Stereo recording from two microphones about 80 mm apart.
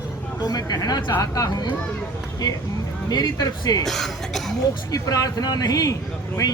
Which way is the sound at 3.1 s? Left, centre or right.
Left.